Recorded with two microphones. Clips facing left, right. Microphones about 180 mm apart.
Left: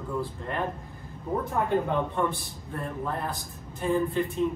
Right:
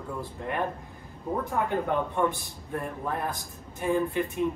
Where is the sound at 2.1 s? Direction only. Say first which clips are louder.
Right 1 dB; 15° right (ahead or behind).